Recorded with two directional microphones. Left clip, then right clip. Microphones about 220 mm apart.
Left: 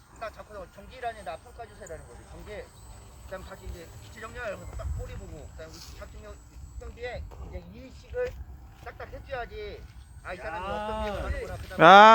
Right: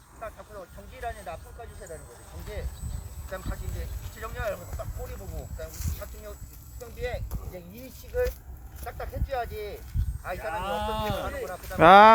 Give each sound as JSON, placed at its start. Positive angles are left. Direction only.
{"t": 0.2, "sound": "speech", "side_deg": 20}
{"t": 1.1, "sound": "speech", "side_deg": 5}
{"t": 3.2, "sound": "speech", "side_deg": -25}
{"t": 6.7, "sound": "speech", "side_deg": -55}
{"t": 11.8, "sound": "speech", "side_deg": 5}